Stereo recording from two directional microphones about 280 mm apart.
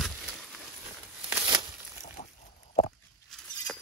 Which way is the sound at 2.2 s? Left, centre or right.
Left.